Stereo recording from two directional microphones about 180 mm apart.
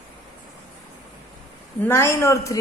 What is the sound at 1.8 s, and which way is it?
Speech, 15° left (ahead or behind).